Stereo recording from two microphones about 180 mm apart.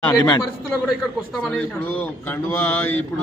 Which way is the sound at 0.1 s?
25° left (ahead or behind).